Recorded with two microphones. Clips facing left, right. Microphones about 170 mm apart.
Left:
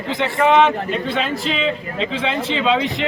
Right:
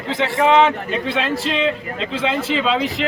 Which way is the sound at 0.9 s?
Centre (ahead or behind).